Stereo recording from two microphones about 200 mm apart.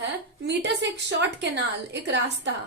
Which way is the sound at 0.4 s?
60° right (ahead or behind).